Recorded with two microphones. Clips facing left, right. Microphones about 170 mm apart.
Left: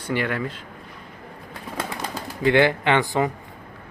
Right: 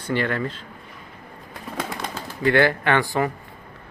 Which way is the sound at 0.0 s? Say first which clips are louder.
Right 1 dB; 10° left (ahead or behind).